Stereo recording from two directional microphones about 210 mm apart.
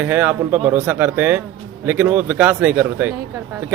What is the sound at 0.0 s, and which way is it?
A man's voice, 10° right (ahead or behind).